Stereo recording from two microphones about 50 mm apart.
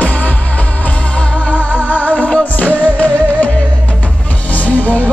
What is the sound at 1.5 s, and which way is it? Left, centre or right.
Music, left.